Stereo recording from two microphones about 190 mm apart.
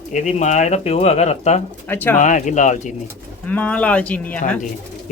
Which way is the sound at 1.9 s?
10° left (ahead or behind).